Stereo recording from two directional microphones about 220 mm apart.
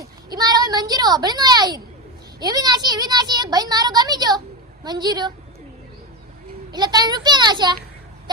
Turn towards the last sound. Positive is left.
turn(degrees=-20)  # may be behind; listen again after turning